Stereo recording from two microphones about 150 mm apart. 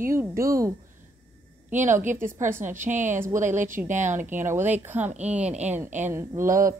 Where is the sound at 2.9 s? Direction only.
55° right (ahead or behind).